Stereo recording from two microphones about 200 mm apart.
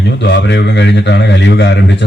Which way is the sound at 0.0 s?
60° left (ahead or behind).